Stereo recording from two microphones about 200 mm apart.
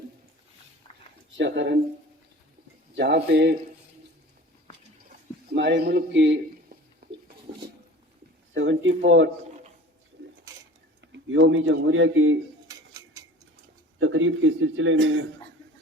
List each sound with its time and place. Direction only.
1.4 s speech: 65° right (ahead or behind)
2.9 s speech: 55° right (ahead or behind)
5.5 s speech: 60° right (ahead or behind)
7.0 s a sound: 50° right (ahead or behind)
8.5 s a man's voice: 70° right (ahead or behind)
10.2 s a sound: 60° right (ahead or behind)
11.0 s speech: 65° right (ahead or behind)
12.6 s cutlery: 15° right (ahead or behind)
14.0 s a man's voice: 80° right